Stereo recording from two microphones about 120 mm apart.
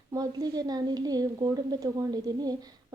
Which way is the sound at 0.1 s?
30° right (ahead or behind).